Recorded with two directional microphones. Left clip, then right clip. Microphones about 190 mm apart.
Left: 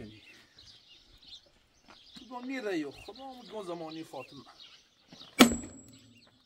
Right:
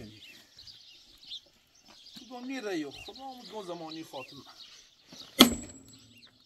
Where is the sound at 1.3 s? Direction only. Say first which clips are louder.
Right 8 dB; 55° left (ahead or behind).